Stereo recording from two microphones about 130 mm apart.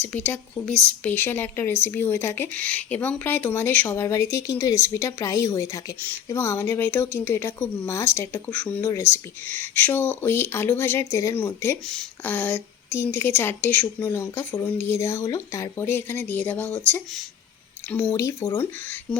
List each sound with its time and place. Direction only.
0.0 s speech: 15° left (ahead or behind)
14.1 s speech: 20° left (ahead or behind)
18.1 s speech: 25° left (ahead or behind)